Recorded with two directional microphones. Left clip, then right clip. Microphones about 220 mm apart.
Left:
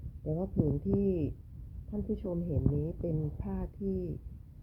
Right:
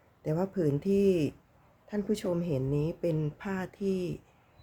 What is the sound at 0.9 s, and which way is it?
Speech, 20° right (ahead or behind).